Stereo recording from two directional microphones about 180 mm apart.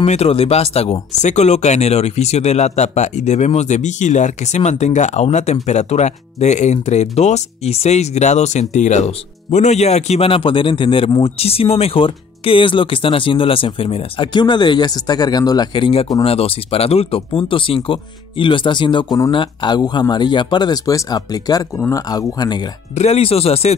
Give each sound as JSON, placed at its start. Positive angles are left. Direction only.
{"t": 0.0, "sound": "a man's voice", "side_deg": 35}
{"t": 21.7, "sound": "speech", "side_deg": 10}
{"t": 22.1, "sound": "a man's voice", "side_deg": 20}
{"t": 22.9, "sound": "speech", "side_deg": 35}